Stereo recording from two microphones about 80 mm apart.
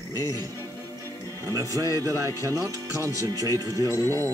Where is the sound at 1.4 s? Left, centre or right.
Right.